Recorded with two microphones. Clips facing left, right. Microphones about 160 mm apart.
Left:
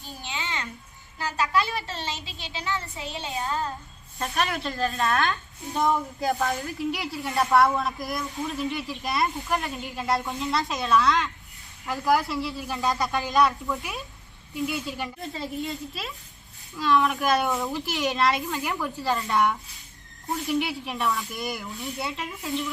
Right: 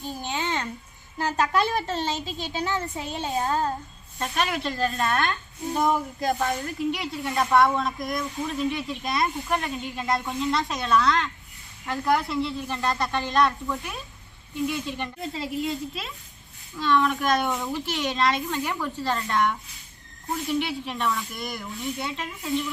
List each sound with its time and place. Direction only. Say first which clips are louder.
0.2 s babbling: right 4 dB; 45° right (ahead or behind)
1.2 s a woman's voice: right 2 dB; 45° right (ahead or behind)
4.2 s a woman's voice: right 1 dB; centre (ahead or behind)